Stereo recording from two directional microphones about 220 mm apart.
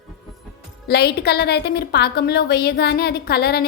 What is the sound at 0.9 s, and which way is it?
A woman's voice, 45° left (ahead or behind).